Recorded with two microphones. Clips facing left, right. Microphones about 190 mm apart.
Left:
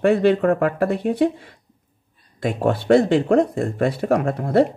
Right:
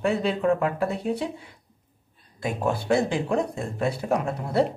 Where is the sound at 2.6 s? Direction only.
90° left; by 4.5 s 60° left (ahead or behind).